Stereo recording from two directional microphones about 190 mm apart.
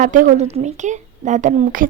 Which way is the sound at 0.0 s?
45° right (ahead or behind).